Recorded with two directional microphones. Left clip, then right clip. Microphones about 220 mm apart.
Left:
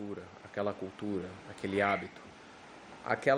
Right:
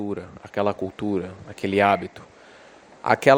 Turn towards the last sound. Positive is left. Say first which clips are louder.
# right 13 dB
turn(degrees=-40)  # may be behind; listen again after turning